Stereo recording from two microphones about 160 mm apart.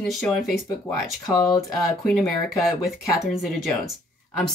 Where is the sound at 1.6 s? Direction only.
Centre (ahead or behind).